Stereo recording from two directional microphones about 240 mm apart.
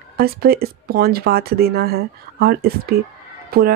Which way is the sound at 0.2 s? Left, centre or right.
Right.